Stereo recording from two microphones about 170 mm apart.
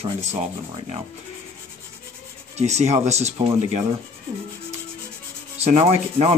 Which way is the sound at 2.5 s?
40° right (ahead or behind).